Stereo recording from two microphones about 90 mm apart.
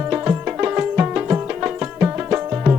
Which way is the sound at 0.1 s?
20° right (ahead or behind).